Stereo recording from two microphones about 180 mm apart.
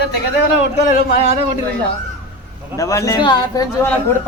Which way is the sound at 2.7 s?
15° left (ahead or behind).